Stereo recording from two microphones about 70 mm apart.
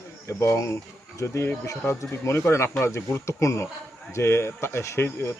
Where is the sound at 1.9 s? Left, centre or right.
Left.